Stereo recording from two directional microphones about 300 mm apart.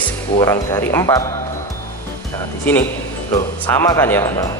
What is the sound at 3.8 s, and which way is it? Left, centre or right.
Speech, centre.